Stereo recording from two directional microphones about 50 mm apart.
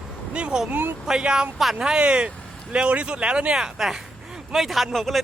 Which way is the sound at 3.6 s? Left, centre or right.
Centre.